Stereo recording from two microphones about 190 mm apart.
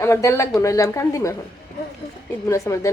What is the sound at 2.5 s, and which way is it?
Speech, 15° left (ahead or behind).